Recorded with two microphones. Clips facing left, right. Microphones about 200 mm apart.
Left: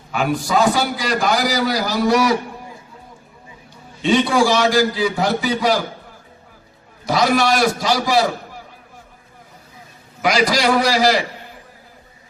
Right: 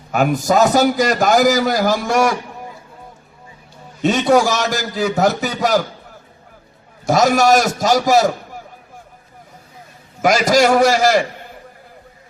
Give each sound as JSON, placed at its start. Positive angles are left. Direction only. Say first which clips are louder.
{"t": 0.1, "sound": "a man's voice", "louder": "right 4 dB", "side_deg": -45}
{"t": 4.0, "sound": "a man's voice", "louder": "right 2 dB", "side_deg": -45}
{"t": 7.0, "sound": "a man's voice", "louder": "right 3 dB", "side_deg": -45}
{"t": 10.2, "sound": "a man's voice", "louder": "right 4 dB", "side_deg": -45}